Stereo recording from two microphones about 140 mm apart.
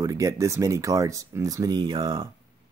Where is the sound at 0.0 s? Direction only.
25° right (ahead or behind).